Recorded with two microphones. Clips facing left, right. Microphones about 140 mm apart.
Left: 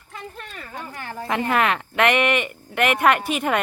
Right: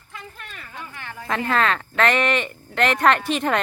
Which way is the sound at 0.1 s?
40° left (ahead or behind).